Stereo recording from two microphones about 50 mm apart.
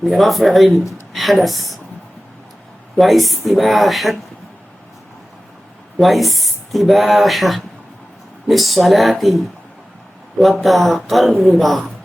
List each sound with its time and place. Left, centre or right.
0.1 s a woman's voice: centre
3.0 s speech: centre
6.0 s speech: centre